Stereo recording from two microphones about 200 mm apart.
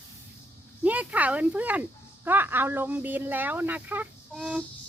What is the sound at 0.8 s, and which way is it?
Speech, 5° right (ahead or behind).